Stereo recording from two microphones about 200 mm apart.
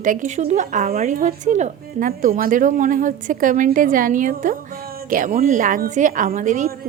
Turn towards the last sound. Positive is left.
turn(degrees=-40)  # may be behind; listen again after turning